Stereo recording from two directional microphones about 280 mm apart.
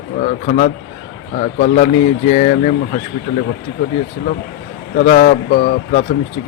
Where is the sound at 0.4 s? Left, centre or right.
Left.